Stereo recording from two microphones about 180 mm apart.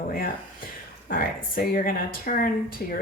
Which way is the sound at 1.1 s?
55° left (ahead or behind).